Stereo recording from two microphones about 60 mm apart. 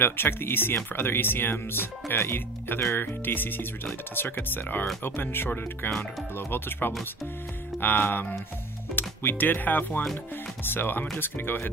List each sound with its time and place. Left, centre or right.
0.0 s speech: left